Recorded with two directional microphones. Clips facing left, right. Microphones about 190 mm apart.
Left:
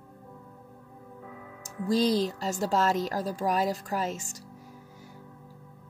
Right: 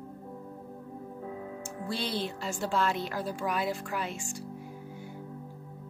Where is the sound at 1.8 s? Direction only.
40° left (ahead or behind).